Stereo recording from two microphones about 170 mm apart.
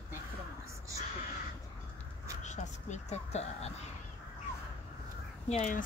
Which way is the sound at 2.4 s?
45° left (ahead or behind).